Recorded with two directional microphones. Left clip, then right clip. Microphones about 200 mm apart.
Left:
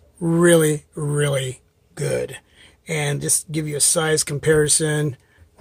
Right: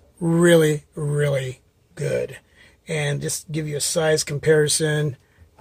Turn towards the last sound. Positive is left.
turn(degrees=15)  # may be behind; listen again after turning